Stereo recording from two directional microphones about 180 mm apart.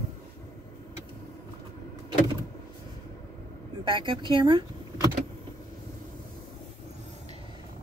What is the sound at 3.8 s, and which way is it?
Speech, 25° right (ahead or behind).